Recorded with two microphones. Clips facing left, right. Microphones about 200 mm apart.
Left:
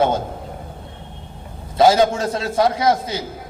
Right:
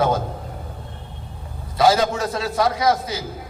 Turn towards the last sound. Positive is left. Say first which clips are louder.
# left 2 dB
turn(degrees=25)  # may be behind; listen again after turning